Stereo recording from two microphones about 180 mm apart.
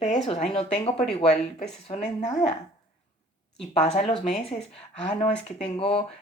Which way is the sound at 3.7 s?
35° left (ahead or behind).